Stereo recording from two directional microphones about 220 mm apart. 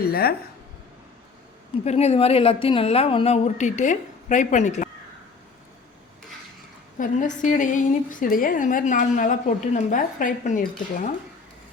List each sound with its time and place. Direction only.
0.0 s speech: 45° left (ahead or behind)
1.8 s a woman's voice: 30° left (ahead or behind)
7.0 s a woman's voice: 35° left (ahead or behind)